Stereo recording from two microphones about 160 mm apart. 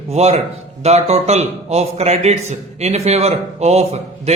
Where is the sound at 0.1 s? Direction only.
40° right (ahead or behind).